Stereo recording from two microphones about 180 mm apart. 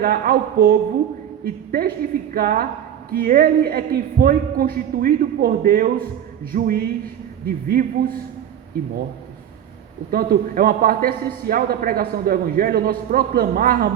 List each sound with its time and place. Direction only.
0.0 s a man's voice: 55° right (ahead or behind)
10.1 s a man's voice: 55° right (ahead or behind)